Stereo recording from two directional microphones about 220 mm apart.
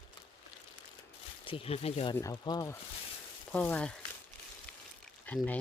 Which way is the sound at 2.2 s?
15° left (ahead or behind).